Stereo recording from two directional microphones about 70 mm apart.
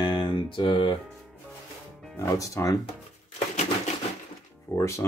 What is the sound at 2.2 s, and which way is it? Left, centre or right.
Speech, left.